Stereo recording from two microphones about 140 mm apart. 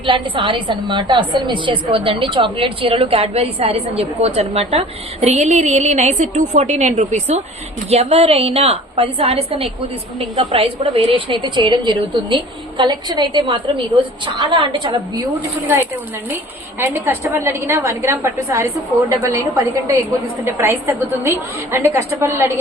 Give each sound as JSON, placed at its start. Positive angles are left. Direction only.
{"t": 0.0, "sound": "a woman's voice", "side_deg": -35}
{"t": 15.6, "sound": "a woman's voice", "side_deg": -15}